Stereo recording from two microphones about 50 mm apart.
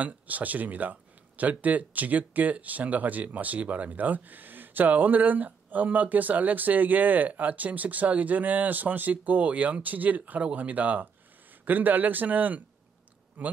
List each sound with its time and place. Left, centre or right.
0.0 s speech: right